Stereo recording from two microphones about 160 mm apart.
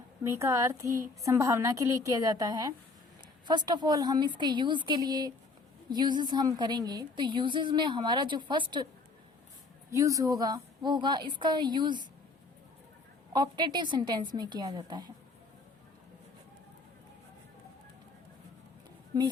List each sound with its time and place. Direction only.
0.3 s a woman's voice: 20° right (ahead or behind)
9.9 s a woman's voice: 20° right (ahead or behind)
13.3 s a woman's voice: 25° right (ahead or behind)